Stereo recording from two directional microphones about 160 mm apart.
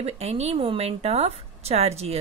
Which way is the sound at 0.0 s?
40° right (ahead or behind).